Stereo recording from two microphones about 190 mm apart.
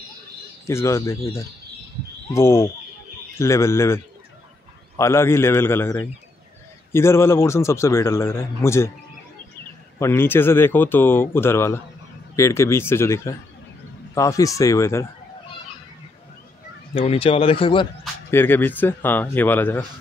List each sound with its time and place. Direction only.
0.7 s a man's voice: 15° left (ahead or behind)
9.9 s a man's voice: 15° left (ahead or behind)
16.9 s a man's voice: 30° left (ahead or behind)
18.3 s a man's voice: 10° left (ahead or behind)